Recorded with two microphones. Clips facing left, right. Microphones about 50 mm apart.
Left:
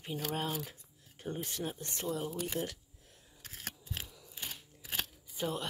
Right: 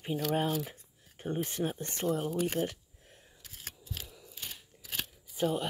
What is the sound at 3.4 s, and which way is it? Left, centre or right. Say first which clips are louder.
Scissors: left 3 dB; left.